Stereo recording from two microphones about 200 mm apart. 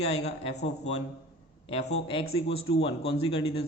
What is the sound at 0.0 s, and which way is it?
Speech, 30° left (ahead or behind).